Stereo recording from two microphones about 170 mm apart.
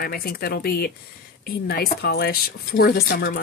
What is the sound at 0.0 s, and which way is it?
Speech, 60° left (ahead or behind).